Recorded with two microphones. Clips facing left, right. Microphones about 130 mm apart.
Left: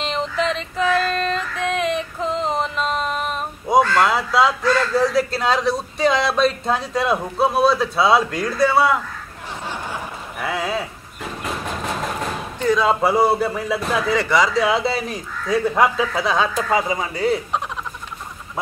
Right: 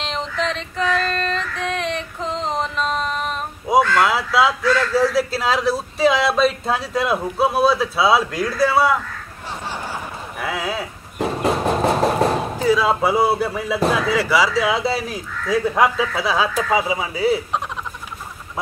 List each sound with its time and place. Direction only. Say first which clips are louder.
0.0 s female singing: left 2 dB; centre (ahead or behind)
4.0 s a man's voice: even; centre (ahead or behind)
10.4 s a man's voice: left 1 dB; centre (ahead or behind)
11.1 s a sound: right 9 dB; 35° right (ahead or behind)
12.5 s a man's voice: left 3 dB; 5° right (ahead or behind)